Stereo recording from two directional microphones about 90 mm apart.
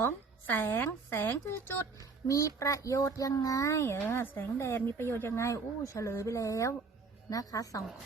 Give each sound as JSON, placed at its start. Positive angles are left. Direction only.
{"t": 0.5, "sound": "a woman's voice", "side_deg": 20}
{"t": 2.2, "sound": "a child's voice", "side_deg": 40}